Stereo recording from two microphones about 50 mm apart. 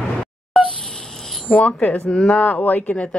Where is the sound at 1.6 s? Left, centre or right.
Left.